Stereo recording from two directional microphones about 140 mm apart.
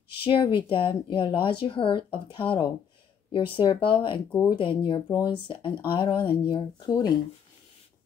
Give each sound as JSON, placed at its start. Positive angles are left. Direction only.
{"t": 0.2, "sound": "speech", "side_deg": 40}